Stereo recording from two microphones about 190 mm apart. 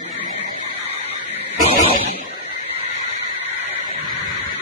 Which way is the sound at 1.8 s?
45° right (ahead or behind).